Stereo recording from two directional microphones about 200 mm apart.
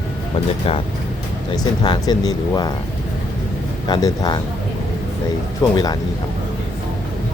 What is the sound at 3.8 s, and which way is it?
Speech, 20° left (ahead or behind).